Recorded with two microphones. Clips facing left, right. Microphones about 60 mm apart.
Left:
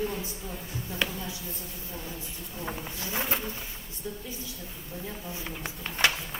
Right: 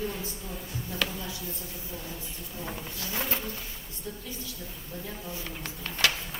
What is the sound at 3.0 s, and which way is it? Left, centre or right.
Speech, left.